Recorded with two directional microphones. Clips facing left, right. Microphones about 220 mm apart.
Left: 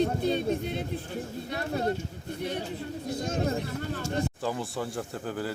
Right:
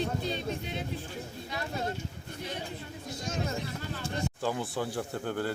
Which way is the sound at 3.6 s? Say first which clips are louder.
Left 4 dB; 45° left (ahead or behind).